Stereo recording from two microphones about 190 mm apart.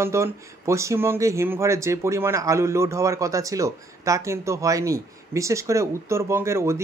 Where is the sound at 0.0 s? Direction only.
15° right (ahead or behind).